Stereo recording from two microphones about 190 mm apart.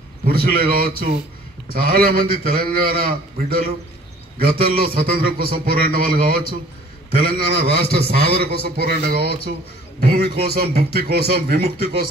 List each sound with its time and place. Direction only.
0.3 s a man's voice: 55° right (ahead or behind)
7.2 s a man's voice: 60° right (ahead or behind)